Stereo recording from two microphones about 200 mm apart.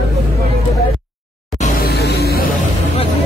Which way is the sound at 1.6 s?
50° left (ahead or behind).